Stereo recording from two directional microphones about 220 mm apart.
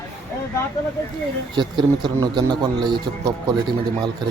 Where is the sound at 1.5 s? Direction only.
20° right (ahead or behind).